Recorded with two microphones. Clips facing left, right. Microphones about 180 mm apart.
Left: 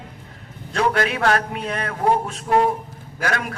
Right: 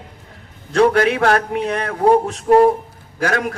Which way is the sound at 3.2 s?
45° right (ahead or behind).